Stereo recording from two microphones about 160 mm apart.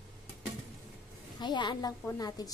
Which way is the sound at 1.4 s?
30° left (ahead or behind).